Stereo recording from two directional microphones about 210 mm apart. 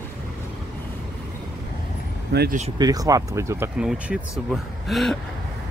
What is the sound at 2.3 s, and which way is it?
Speech, 50° right (ahead or behind).